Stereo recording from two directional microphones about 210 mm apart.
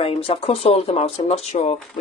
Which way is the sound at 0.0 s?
25° left (ahead or behind).